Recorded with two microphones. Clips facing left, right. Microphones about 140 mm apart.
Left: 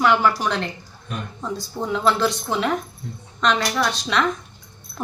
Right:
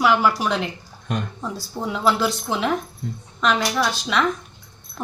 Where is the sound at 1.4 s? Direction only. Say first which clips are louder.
Left 1 dB; 5° right (ahead or behind).